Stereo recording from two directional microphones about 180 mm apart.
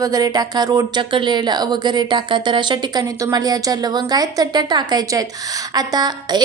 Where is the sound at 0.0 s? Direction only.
20° right (ahead or behind).